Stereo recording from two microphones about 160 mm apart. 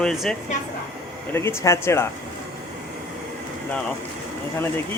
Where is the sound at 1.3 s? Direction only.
15° left (ahead or behind).